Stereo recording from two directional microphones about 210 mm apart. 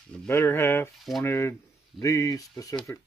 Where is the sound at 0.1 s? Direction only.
10° left (ahead or behind).